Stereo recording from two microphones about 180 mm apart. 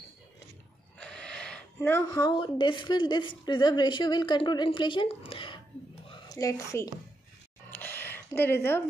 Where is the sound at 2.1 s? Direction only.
25° left (ahead or behind).